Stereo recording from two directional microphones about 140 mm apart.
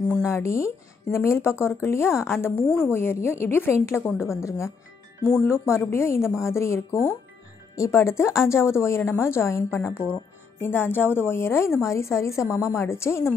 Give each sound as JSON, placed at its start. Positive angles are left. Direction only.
{"t": 0.2, "sound": "a woman's voice", "side_deg": 20}